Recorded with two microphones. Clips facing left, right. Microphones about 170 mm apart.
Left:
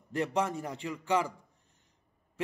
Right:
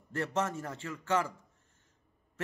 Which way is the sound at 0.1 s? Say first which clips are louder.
Left 2 dB; 15° left (ahead or behind).